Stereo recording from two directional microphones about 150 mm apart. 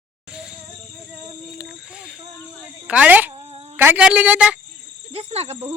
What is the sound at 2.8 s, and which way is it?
Speech, 10° right (ahead or behind).